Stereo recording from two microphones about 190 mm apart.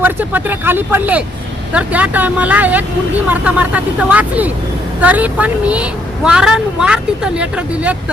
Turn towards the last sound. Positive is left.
turn(degrees=-5)  # may be behind; listen again after turning